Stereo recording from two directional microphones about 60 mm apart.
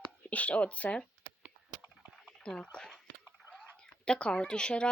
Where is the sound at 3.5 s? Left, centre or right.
Centre.